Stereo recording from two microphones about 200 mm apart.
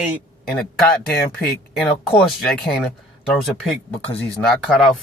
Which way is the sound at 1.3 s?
Centre (ahead or behind).